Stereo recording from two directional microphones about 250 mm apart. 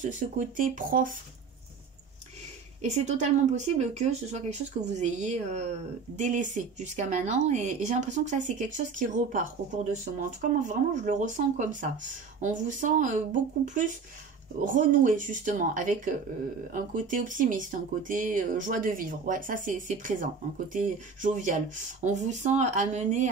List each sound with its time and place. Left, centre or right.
0.0 s speech: right
2.8 s speech: right
10.6 s speech: right